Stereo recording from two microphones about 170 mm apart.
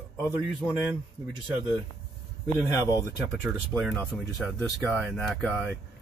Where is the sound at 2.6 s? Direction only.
20° left (ahead or behind).